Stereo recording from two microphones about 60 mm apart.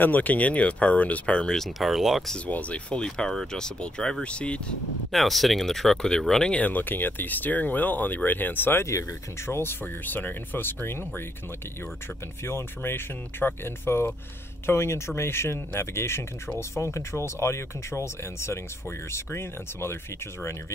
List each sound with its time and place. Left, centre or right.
0.0 s speech: left
1.6 s speech: centre
2.3 s speech: left
5.1 s speech: centre
6.5 s speech: left
12.4 s speech: left